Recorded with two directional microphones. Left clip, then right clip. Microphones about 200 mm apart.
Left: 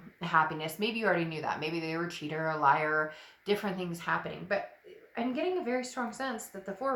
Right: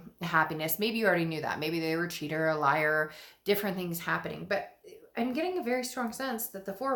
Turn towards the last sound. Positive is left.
turn(degrees=-40)  # may be behind; listen again after turning